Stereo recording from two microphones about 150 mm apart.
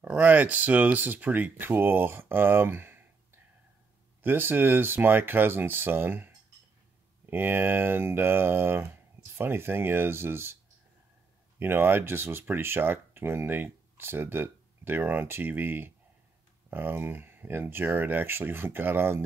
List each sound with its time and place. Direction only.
0.0 s speech: 10° right (ahead or behind)
4.2 s speech: 15° right (ahead or behind)
11.6 s speech: 15° right (ahead or behind)